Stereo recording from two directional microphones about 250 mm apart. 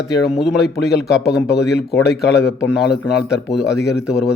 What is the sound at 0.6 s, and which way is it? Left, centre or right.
Speech, left.